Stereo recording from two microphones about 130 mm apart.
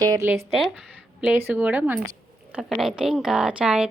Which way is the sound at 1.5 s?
10° right (ahead or behind).